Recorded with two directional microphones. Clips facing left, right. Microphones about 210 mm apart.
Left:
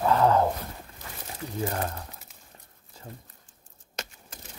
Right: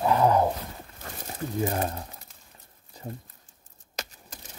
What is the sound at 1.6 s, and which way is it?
Speech, 20° right (ahead or behind).